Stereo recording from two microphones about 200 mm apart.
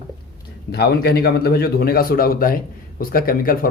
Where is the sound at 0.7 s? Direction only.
55° left (ahead or behind).